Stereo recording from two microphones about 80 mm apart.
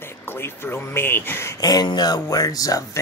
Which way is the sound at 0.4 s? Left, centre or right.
Left.